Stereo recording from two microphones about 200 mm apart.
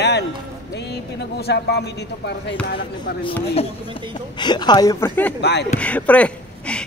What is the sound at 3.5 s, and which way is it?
Speech, 30° left (ahead or behind).